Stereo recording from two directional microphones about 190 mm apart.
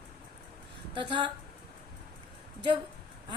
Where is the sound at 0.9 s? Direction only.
25° right (ahead or behind).